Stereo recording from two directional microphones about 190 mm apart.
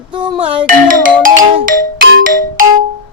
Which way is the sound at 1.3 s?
20° right (ahead or behind).